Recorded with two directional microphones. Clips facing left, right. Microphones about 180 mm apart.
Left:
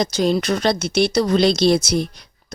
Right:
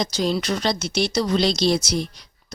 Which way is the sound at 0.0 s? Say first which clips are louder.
Left 4 dB; 55° left (ahead or behind).